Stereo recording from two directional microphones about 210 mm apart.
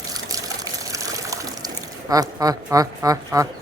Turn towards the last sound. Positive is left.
turn(degrees=-15)  # may be behind; listen again after turning